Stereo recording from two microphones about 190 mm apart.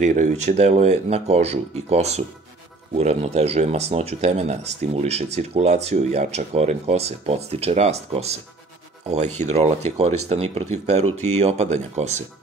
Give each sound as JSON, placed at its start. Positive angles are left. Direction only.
{"t": 0.0, "sound": "speech", "side_deg": -40}